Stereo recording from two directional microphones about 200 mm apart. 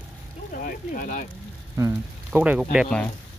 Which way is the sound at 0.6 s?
45° left (ahead or behind).